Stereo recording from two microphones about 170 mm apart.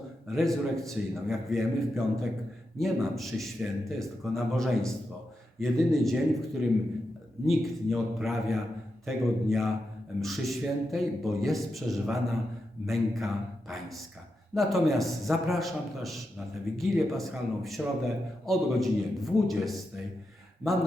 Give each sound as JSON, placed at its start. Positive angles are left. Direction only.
{"t": 0.3, "sound": "a man's voice", "side_deg": 0}
{"t": 7.4, "sound": "a man's voice", "side_deg": 0}